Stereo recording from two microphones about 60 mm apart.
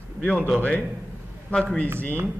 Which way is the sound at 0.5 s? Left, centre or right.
Left.